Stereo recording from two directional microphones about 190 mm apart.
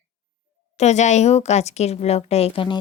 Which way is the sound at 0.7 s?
35° left (ahead or behind).